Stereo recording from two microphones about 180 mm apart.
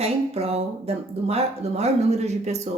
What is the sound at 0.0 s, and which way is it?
Speech, 35° right (ahead or behind).